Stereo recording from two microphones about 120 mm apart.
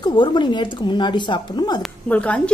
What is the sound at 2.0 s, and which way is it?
Speech, 10° left (ahead or behind).